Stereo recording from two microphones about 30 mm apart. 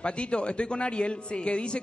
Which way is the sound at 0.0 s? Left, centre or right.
Left.